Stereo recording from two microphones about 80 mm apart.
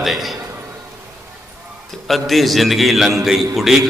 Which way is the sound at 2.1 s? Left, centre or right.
Centre.